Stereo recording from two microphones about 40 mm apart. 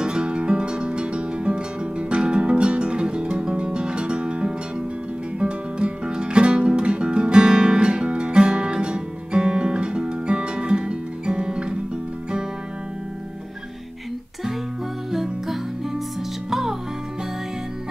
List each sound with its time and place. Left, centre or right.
0.0 s music: right
16.4 s music: centre